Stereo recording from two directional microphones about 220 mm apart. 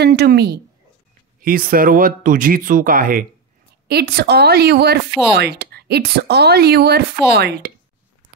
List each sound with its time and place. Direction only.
0.0 s speech: 45° right (ahead or behind)